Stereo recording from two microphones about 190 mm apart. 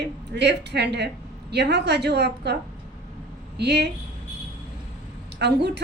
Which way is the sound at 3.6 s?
60° right (ahead or behind).